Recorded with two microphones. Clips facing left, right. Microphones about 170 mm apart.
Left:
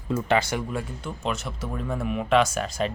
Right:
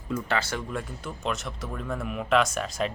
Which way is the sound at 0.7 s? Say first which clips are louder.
Left 2 dB; centre (ahead or behind).